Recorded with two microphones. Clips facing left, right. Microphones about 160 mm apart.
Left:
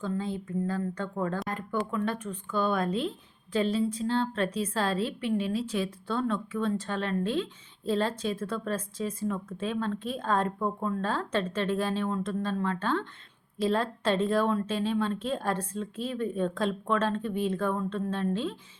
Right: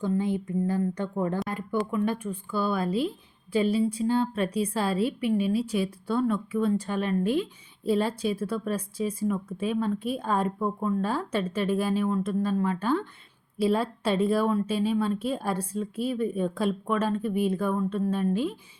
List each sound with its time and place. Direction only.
0.0 s speech: 15° right (ahead or behind)